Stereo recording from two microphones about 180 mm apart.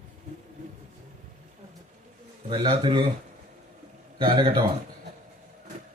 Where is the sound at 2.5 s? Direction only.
25° right (ahead or behind).